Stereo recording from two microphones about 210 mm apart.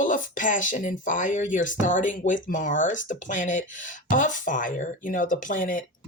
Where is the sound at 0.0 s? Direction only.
40° left (ahead or behind).